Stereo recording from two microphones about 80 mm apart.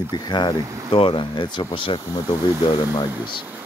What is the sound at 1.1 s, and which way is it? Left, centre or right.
Speech, left.